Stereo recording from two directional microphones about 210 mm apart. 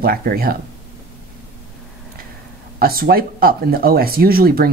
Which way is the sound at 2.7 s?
45° right (ahead or behind).